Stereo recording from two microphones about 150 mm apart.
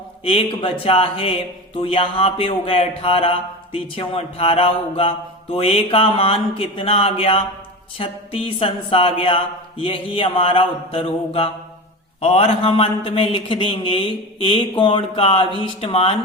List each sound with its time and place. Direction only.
0.3 s speech: 35° left (ahead or behind)